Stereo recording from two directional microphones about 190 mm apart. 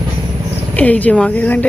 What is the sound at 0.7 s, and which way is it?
Speech, 10° left (ahead or behind).